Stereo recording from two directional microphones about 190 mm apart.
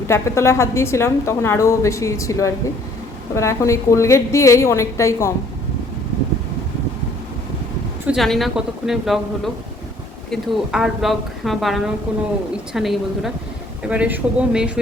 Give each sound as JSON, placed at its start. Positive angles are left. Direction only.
{"t": 0.1, "sound": "a woman's voice", "side_deg": 15}
{"t": 8.0, "sound": "speech", "side_deg": 0}